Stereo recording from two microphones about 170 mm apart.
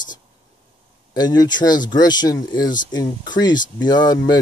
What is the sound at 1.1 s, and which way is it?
Speech, 25° left (ahead or behind).